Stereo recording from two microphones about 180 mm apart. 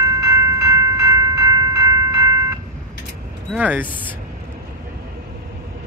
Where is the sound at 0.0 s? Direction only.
15° right (ahead or behind).